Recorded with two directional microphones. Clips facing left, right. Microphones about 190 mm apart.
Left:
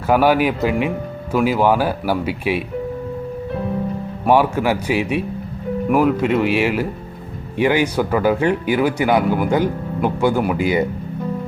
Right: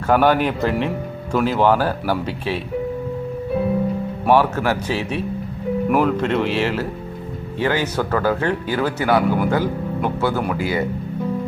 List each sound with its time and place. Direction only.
0.1 s speech: 10° left (ahead or behind)
4.3 s speech: 10° left (ahead or behind)